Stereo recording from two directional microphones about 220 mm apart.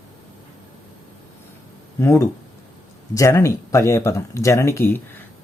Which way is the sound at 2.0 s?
10° left (ahead or behind).